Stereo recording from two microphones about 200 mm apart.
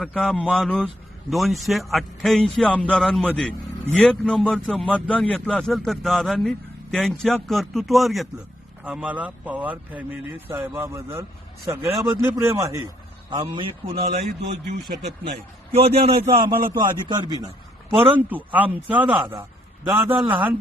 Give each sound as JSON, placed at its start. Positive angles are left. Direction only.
{"t": 0.0, "sound": "a man's voice", "side_deg": 0}
{"t": 13.9, "sound": "a man's voice", "side_deg": -45}
{"t": 15.2, "sound": "a man's voice", "side_deg": -30}
{"t": 18.0, "sound": "a man's voice", "side_deg": -10}